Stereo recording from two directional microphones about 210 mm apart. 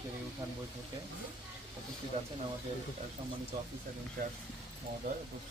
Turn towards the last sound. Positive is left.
turn(degrees=-40)  # may be behind; listen again after turning